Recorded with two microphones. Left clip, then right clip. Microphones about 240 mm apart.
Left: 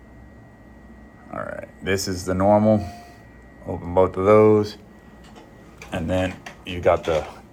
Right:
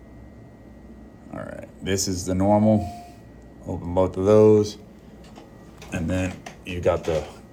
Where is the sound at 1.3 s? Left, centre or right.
Left.